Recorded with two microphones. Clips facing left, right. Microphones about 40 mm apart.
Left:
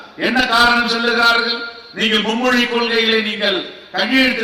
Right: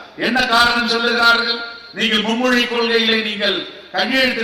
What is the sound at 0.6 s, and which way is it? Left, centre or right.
Speech, left.